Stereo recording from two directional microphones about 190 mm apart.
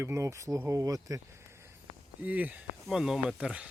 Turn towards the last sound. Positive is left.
turn(degrees=-5)  # may be behind; listen again after turning